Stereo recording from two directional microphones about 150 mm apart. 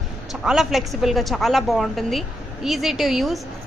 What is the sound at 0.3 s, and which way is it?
A woman's voice, 5° right (ahead or behind).